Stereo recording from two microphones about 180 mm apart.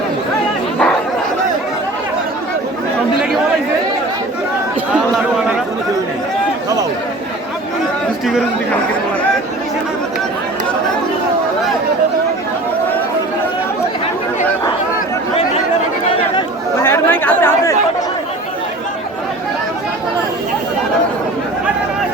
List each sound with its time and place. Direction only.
16.7 s chatter: 15° left (ahead or behind)